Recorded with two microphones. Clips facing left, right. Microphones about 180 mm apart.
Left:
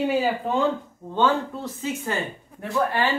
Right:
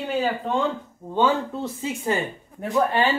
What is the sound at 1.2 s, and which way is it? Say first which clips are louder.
A woman's voice: right 1 dB; 10° right (ahead or behind).